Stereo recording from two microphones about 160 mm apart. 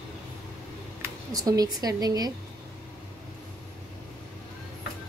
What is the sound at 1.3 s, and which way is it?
Speech, 20° right (ahead or behind).